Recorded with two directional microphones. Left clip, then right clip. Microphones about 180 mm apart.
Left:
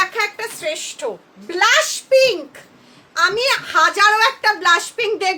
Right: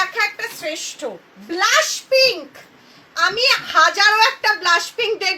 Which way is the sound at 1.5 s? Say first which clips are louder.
Left 2 dB; 40° left (ahead or behind).